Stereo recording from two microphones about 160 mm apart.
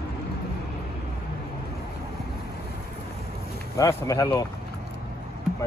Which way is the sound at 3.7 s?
20° left (ahead or behind).